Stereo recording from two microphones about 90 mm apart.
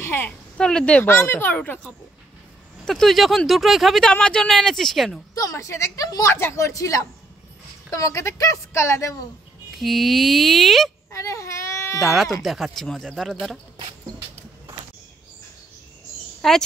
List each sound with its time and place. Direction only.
0.0 s a sound: 25° left (ahead or behind)
0.6 s speech: 10° left (ahead or behind)
1.0 s speech: 25° left (ahead or behind)
2.8 s speech: 5° left (ahead or behind)
4.1 s speech: 10° left (ahead or behind)
5.3 s speech: 40° left (ahead or behind)
9.8 s speech: centre (ahead or behind)
11.1 s baby cry: 35° left (ahead or behind)
12.4 s speech: centre (ahead or behind)
16.3 s a sound: 5° left (ahead or behind)